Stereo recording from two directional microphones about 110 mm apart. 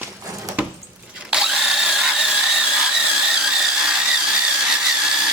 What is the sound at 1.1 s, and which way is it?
Drill, 5° right (ahead or behind).